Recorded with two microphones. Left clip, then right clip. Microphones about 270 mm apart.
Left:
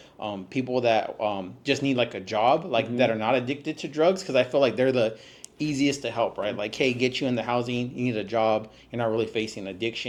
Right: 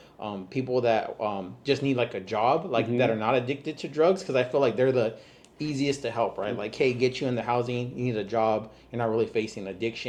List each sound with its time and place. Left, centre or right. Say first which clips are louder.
0.2 s speech: left 2 dB; left
7.1 s speech: left 1 dB; centre